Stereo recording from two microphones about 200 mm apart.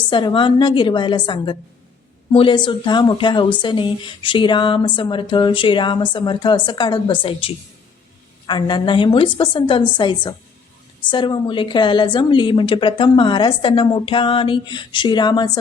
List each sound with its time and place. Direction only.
0.1 s a woman's voice: 25° left (ahead or behind)